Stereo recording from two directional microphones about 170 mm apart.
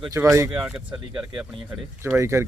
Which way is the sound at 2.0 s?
15° right (ahead or behind).